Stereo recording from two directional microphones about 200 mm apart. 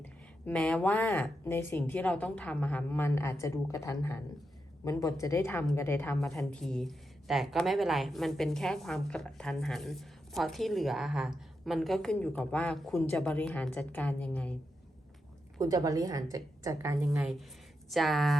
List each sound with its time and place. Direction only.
0.0 s a woman's voice: 5° left (ahead or behind)
15.5 s a woman's voice: 15° right (ahead or behind)
17.2 s a woman's voice: 5° right (ahead or behind)